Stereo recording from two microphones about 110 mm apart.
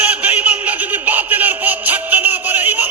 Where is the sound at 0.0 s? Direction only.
15° right (ahead or behind).